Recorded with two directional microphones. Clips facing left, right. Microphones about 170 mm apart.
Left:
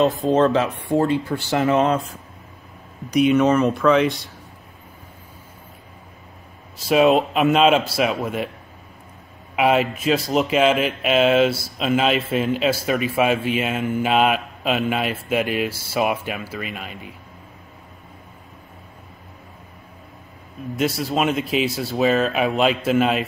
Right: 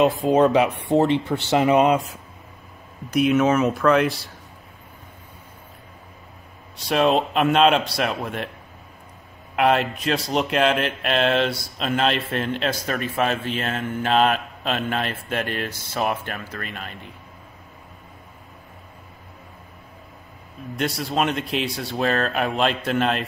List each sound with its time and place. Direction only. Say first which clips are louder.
0.0 s speech: even; 10° right (ahead or behind)
3.1 s speech: left 2 dB; centre (ahead or behind)
6.8 s speech: left 4 dB; 5° left (ahead or behind)
9.6 s speech: left 1 dB; 5° left (ahead or behind)
20.7 s speech: left 2 dB; centre (ahead or behind)